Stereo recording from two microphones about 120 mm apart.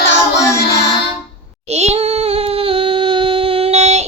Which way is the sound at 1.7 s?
60° right (ahead or behind).